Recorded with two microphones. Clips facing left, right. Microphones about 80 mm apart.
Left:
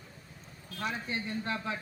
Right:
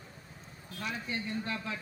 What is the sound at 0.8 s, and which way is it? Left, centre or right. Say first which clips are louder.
Speech: left 2 dB; left.